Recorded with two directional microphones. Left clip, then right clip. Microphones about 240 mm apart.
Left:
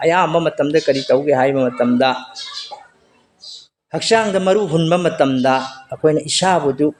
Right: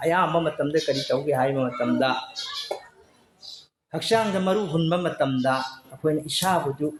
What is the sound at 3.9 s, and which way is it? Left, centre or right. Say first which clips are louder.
Speech: left 8 dB; left.